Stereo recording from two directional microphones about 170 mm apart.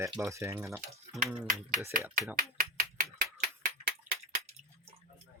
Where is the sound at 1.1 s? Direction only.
Centre (ahead or behind).